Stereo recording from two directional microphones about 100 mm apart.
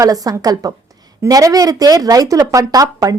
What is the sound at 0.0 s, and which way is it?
Speech, 40° right (ahead or behind).